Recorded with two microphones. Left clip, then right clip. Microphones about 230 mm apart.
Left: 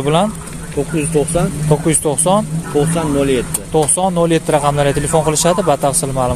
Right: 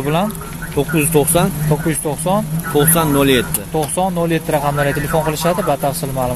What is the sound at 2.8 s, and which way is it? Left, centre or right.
Speech, right.